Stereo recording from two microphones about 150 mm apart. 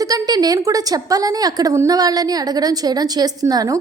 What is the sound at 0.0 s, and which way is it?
A woman's voice, 25° right (ahead or behind).